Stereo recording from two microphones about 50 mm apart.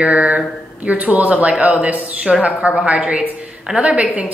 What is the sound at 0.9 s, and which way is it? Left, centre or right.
A woman's voice, right.